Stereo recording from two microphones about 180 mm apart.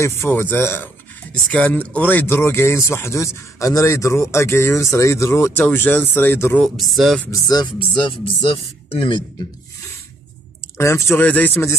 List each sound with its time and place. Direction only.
0.0 s speech: 15° left (ahead or behind)
7.2 s speech: 20° left (ahead or behind)
10.8 s speech: 15° left (ahead or behind)